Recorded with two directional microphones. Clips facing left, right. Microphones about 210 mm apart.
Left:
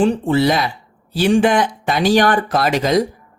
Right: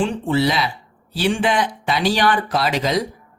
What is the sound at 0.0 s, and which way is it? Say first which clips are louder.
Speech: left 4 dB; 45° left (ahead or behind).